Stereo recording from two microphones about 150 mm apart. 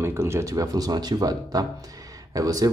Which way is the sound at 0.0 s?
15° right (ahead or behind).